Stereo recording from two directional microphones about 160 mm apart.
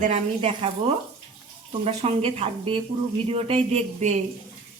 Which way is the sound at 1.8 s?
40° right (ahead or behind).